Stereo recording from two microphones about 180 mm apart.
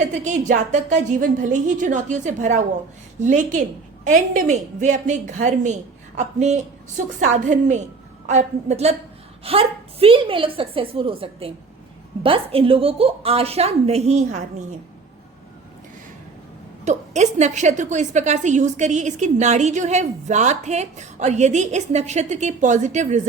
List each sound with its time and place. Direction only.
0.0 s a woman's voice: 40° right (ahead or behind)
16.8 s a woman's voice: 40° right (ahead or behind)